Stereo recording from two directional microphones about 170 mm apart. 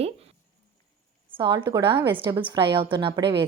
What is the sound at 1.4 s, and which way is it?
A woman's voice, 30° right (ahead or behind).